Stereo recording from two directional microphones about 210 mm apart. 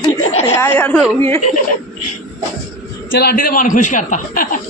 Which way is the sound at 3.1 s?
45° left (ahead or behind).